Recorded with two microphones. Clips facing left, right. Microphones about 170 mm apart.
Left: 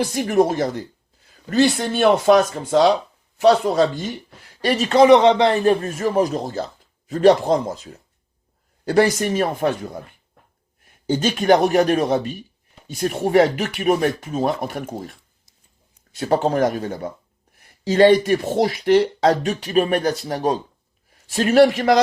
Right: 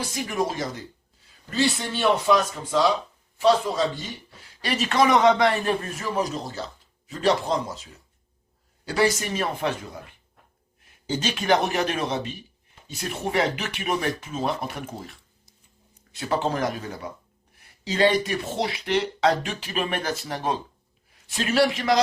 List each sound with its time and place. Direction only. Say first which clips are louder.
0.1 s speech: left 9 dB; 50° left (ahead or behind)
1.5 s speech: left 7 dB; 65° left (ahead or behind)
1.7 s speech: left 8 dB; 45° left (ahead or behind)
2.2 s speech: left 7 dB; 70° left (ahead or behind)
4.6 s speech: left 7 dB; 40° left (ahead or behind)
5.0 s speech: left 6 dB; 25° left (ahead or behind); by 10.0 s 45° left (ahead or behind)
11.0 s a sound: left 7 dB; 55° left (ahead or behind)
11.3 s speech: left 7 dB; 45° left (ahead or behind)
16.2 s speech: left 7 dB; 40° left (ahead or behind)